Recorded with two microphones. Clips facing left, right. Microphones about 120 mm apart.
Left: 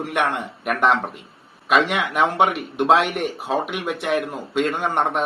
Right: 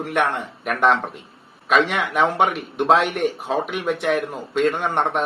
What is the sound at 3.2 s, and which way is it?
A man's voice, 5° left (ahead or behind).